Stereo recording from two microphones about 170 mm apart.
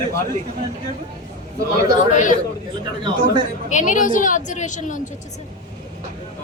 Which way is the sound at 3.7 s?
50° left (ahead or behind).